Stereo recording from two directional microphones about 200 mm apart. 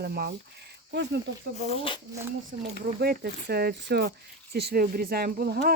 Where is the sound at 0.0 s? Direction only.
50° right (ahead or behind).